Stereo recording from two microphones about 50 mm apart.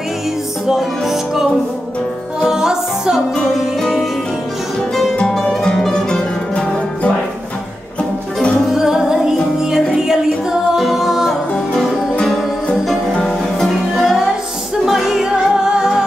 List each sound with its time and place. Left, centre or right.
0.7 s music: centre
5.2 s music: centre
8.6 s music: centre
12.8 s music: centre